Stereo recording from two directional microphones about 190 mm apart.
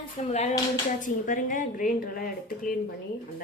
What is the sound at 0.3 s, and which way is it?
A woman's voice, 35° left (ahead or behind).